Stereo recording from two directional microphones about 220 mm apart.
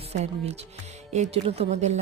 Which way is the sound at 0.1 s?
30° right (ahead or behind).